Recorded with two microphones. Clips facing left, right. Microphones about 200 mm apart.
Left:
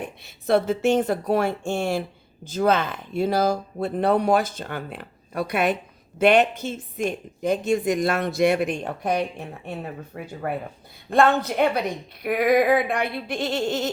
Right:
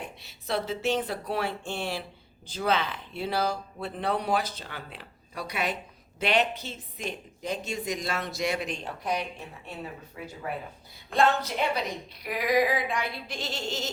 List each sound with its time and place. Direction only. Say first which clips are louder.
0.4 s a woman's voice: left 9 dB; 50° left (ahead or behind)